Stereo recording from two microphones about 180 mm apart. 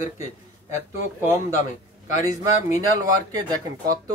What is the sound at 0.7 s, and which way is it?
Speech, 45° left (ahead or behind).